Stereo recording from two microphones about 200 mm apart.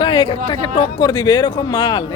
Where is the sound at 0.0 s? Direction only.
25° left (ahead or behind).